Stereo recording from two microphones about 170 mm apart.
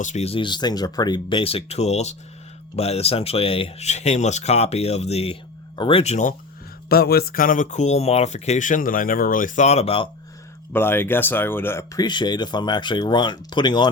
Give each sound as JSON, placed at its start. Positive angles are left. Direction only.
{"t": 0.0, "sound": "speech", "side_deg": 40}
{"t": 6.8, "sound": "speech", "side_deg": 65}
{"t": 10.7, "sound": "speech", "side_deg": 15}